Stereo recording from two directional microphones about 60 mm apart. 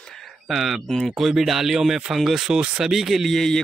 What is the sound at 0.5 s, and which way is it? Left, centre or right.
Speech, centre.